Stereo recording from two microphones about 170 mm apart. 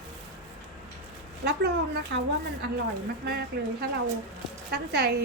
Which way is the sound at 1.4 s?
70° right (ahead or behind).